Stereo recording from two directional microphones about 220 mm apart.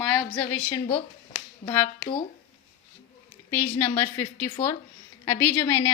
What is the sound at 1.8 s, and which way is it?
Speech, 25° left (ahead or behind).